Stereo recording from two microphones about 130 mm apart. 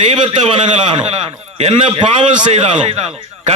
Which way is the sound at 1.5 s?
60° right (ahead or behind).